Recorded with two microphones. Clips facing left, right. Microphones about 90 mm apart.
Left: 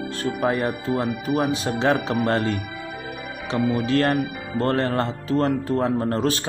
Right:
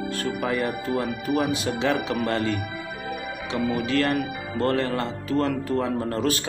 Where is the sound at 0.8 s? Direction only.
25° left (ahead or behind).